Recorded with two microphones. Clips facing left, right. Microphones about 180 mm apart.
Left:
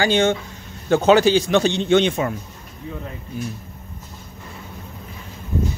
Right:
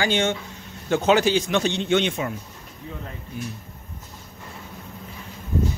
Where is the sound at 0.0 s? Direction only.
35° left (ahead or behind).